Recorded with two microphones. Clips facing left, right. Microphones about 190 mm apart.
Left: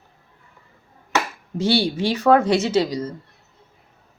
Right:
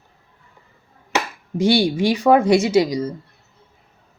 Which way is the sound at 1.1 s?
15° right (ahead or behind).